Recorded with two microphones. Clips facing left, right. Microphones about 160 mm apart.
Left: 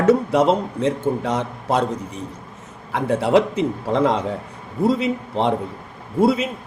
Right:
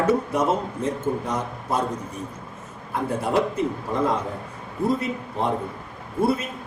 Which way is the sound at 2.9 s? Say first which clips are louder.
Left 6 dB; 90° left.